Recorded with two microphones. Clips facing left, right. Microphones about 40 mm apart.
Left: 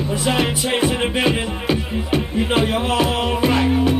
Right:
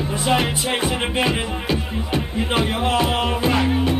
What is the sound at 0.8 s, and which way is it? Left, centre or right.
Music, left.